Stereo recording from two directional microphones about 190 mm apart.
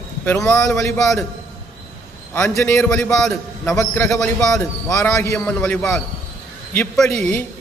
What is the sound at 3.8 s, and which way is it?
Speech, 15° left (ahead or behind).